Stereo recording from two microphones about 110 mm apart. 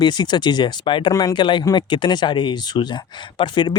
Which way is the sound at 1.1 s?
30° left (ahead or behind).